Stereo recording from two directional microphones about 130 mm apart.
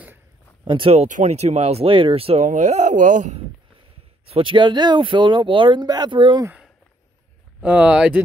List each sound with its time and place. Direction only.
0.7 s speech: 45° right (ahead or behind)
1.0 s speech: 65° right (ahead or behind); by 2.4 s 45° right (ahead or behind)
2.4 s speech: 70° right (ahead or behind)
4.3 s speech: 40° right (ahead or behind)
7.6 s speech: 10° right (ahead or behind)